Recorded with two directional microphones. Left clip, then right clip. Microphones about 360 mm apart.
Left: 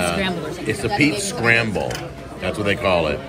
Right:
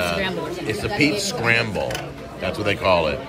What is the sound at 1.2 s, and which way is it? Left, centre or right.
A man's voice, centre.